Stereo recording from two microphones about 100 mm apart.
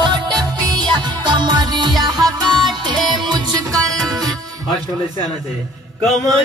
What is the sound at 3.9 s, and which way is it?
Music, centre (ahead or behind).